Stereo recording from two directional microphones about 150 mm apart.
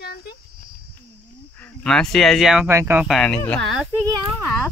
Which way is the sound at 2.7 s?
15° right (ahead or behind).